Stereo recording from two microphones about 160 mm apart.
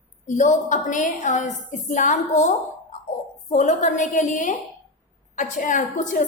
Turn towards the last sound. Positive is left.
turn(degrees=50)  # may be behind; listen again after turning